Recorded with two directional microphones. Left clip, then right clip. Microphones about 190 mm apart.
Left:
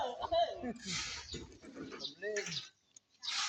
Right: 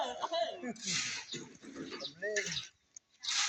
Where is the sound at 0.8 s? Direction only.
50° right (ahead or behind).